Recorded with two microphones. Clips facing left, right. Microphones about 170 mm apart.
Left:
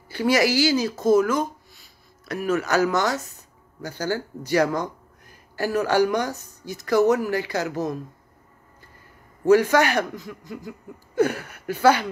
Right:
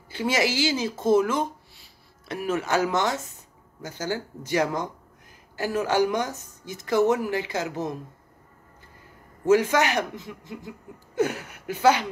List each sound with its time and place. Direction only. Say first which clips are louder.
0.1 s speech: left 5 dB; 20° right (ahead or behind)
9.5 s speech: left 3 dB; 20° right (ahead or behind)